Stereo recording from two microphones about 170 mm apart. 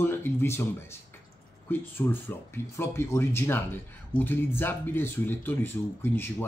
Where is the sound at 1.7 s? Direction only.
10° left (ahead or behind).